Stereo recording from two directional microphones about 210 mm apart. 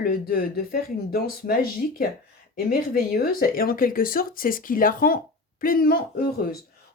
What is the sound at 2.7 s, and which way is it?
Speech, 45° left (ahead or behind).